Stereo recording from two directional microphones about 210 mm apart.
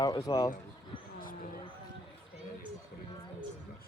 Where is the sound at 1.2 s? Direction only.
40° left (ahead or behind).